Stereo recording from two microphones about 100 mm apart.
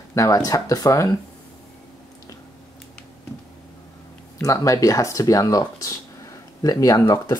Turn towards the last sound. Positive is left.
turn(degrees=25)  # may be behind; listen again after turning